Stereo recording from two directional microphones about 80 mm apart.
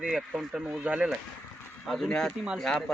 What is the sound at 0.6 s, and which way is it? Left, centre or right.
Speech, centre.